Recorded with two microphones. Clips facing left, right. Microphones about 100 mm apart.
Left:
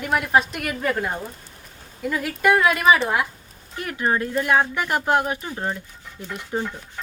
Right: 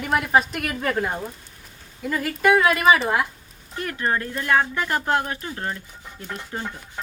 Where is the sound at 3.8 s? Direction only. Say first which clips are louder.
Left 2 dB; 15° left (ahead or behind).